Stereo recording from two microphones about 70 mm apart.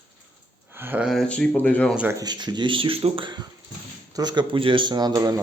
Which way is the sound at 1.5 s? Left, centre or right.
Left.